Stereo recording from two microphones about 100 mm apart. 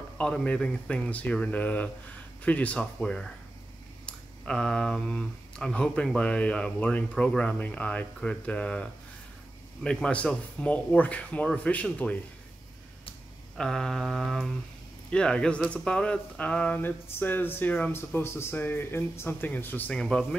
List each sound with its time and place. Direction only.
0.2 s speech: 10° left (ahead or behind)
9.8 s speech: 10° left (ahead or behind)
13.6 s mantra: 5° left (ahead or behind)
15.0 s speech: 10° left (ahead or behind)
20.0 s speech: 10° left (ahead or behind)